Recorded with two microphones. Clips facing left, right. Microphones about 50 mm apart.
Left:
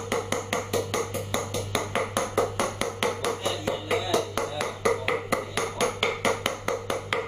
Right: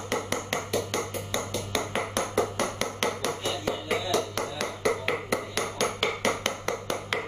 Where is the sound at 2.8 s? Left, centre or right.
Centre.